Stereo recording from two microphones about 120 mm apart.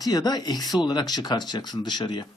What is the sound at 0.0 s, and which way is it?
Speech, 35° left (ahead or behind).